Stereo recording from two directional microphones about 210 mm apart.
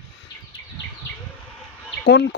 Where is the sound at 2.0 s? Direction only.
55° left (ahead or behind).